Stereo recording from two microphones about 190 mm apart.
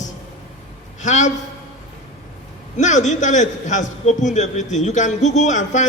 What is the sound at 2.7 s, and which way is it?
A man's voice, 40° left (ahead or behind).